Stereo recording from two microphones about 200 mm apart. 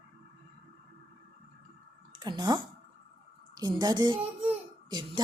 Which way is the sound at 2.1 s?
20° right (ahead or behind).